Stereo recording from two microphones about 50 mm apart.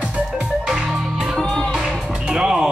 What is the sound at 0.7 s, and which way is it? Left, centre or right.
Music, centre.